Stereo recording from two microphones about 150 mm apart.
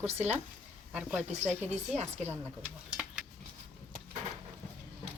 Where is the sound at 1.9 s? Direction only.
45° right (ahead or behind).